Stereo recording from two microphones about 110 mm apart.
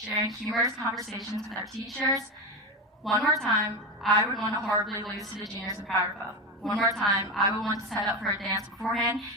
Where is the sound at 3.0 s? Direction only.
Centre (ahead or behind).